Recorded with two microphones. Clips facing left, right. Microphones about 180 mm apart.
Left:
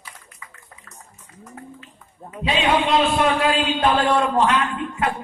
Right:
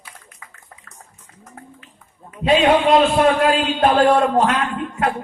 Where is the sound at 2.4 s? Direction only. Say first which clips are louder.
Right 6 dB; 45° right (ahead or behind).